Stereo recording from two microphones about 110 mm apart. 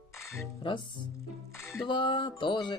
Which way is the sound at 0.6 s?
45° left (ahead or behind).